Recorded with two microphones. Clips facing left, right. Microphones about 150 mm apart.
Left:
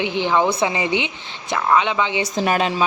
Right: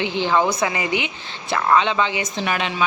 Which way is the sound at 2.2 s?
35° left (ahead or behind).